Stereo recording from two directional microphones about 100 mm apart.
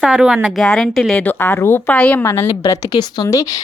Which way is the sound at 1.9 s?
10° left (ahead or behind).